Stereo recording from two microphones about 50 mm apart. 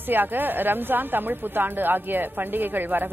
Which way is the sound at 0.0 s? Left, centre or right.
Right.